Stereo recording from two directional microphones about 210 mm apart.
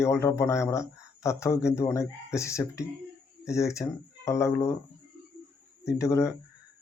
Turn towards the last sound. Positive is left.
turn(degrees=15)  # may be behind; listen again after turning